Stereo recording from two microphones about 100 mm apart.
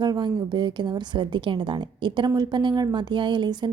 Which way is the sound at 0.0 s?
45° right (ahead or behind).